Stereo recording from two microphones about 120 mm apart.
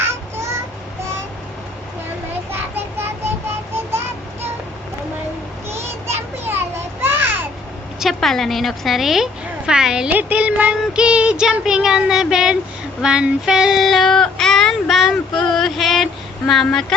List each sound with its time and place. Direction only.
0.0 s child singing: 20° right (ahead or behind)
2.5 s child singing: 20° right (ahead or behind)
5.6 s children playing: 20° right (ahead or behind)
7.9 s a woman's voice: centre (ahead or behind)
13.0 s child singing: 5° right (ahead or behind)
16.5 s a woman's voice: centre (ahead or behind)